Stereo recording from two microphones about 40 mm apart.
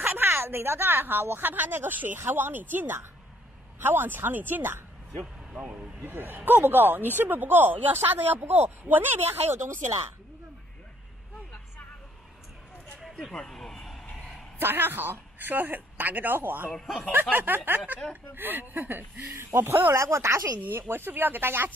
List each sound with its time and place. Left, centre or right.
0.0 s speech: right
5.2 s speech: centre
6.1 s speech: right
8.6 s speech: right
13.2 s vehicle: centre
14.6 s speech: right
16.7 s speech: centre
17.1 s speech: right
19.2 s speech: right
20.1 s speech: right
20.9 s speech: right